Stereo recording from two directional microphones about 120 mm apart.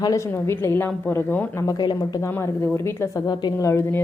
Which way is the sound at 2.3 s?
25° left (ahead or behind).